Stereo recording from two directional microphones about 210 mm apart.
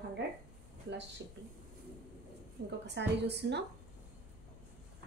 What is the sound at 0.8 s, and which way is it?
Speech, 55° right (ahead or behind).